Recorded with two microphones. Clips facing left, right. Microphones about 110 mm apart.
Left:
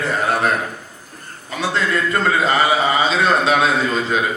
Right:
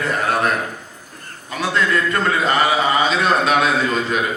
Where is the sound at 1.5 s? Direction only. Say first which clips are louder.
Right 1 dB; 30° left (ahead or behind).